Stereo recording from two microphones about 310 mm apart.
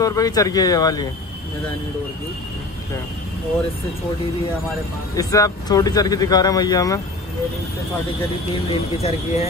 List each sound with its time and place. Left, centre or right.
0.0 s speech: centre
5.1 s speech: centre
8.9 s speech: centre